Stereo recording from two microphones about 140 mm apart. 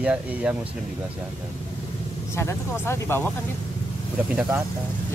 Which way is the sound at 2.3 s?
20° left (ahead or behind).